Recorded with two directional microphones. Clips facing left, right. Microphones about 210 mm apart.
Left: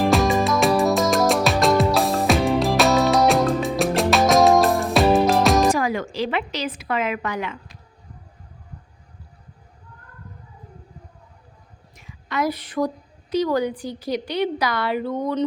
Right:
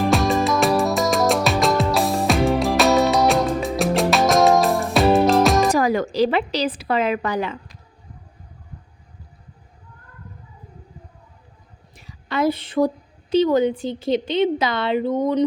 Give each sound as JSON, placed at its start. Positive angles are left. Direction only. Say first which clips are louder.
{"t": 0.1, "sound": "music", "louder": "even", "side_deg": 0}
{"t": 5.7, "sound": "speech", "louder": "right 5 dB", "side_deg": -40}
{"t": 11.9, "sound": "a sound", "louder": "right 3 dB", "side_deg": -30}
{"t": 13.3, "sound": "a woman's voice", "louder": "right 4 dB", "side_deg": -25}